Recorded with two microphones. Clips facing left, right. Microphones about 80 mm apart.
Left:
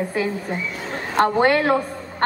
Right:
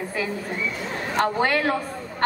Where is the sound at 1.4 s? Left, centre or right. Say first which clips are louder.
Left 5 dB; left.